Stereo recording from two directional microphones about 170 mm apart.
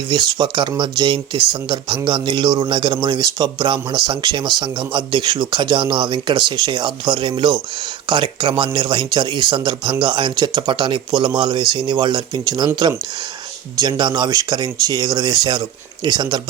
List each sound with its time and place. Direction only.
0.1 s speech: 25° right (ahead or behind)